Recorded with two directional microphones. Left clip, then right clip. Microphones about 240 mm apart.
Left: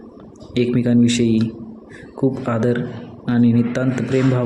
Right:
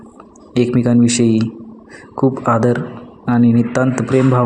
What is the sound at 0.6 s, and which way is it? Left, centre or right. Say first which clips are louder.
Speech: right 3 dB; centre.